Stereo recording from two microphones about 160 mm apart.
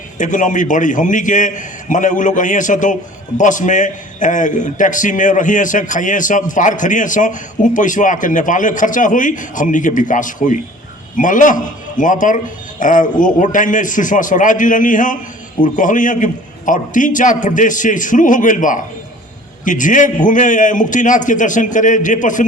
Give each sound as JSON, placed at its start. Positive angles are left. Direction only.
{"t": 0.2, "sound": "a man's voice", "side_deg": 55}